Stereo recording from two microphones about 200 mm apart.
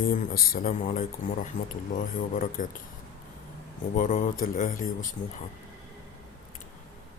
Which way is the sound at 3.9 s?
40° left (ahead or behind).